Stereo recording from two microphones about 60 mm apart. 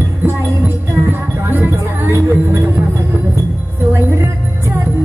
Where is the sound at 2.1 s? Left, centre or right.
Right.